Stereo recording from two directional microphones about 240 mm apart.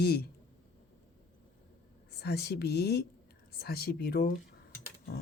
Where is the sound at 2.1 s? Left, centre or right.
Left.